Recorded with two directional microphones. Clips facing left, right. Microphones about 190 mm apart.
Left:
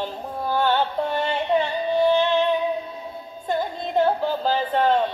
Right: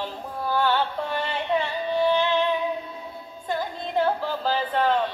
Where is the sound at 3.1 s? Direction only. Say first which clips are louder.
Left 4 dB; 25° left (ahead or behind).